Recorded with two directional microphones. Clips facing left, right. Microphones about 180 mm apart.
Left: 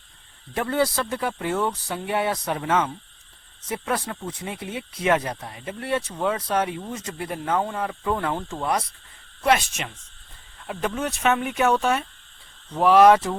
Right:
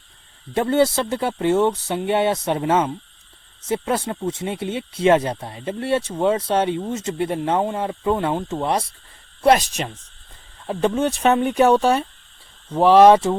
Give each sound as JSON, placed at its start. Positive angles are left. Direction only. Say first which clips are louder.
{"t": 0.5, "sound": "speech", "louder": "right 6 dB", "side_deg": -25}
{"t": 9.4, "sound": "speech", "louder": "right 5 dB", "side_deg": -35}